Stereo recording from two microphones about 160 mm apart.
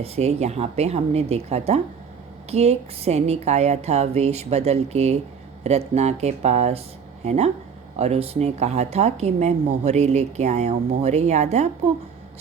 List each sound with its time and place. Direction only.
0.0 s a woman's voice: 40° right (ahead or behind)